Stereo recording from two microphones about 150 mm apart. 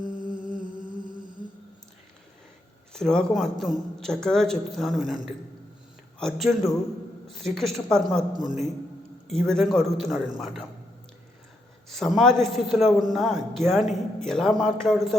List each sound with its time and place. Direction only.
0.0 s humming: 65° left (ahead or behind)
2.9 s a man's voice: 5° left (ahead or behind)
6.1 s a man's voice: centre (ahead or behind)
11.9 s a man's voice: centre (ahead or behind)